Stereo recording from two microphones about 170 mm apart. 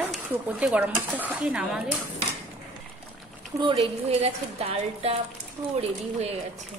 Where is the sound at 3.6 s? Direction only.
35° right (ahead or behind).